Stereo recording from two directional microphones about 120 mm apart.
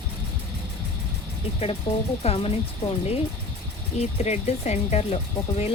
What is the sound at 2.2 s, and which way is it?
Speech, 55° left (ahead or behind).